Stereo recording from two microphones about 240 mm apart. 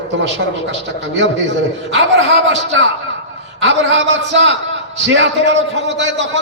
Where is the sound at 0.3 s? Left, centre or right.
Right.